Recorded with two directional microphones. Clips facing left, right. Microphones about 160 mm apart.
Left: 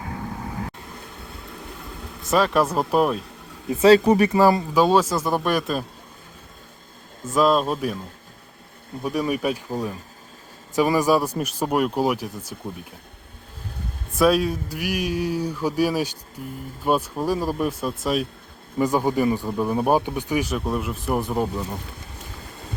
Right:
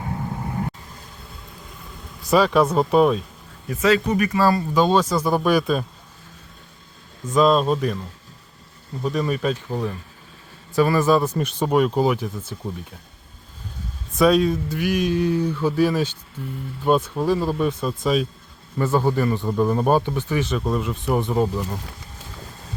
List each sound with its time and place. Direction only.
2.3 s speech: centre (ahead or behind)
3.7 s speech: 30° left (ahead or behind)
4.4 s speech: 20° left (ahead or behind)
4.7 s speech: 5° left (ahead or behind)
7.3 s speech: 5° left (ahead or behind)
9.0 s speech: 10° left (ahead or behind)
14.2 s speech: 5° left (ahead or behind)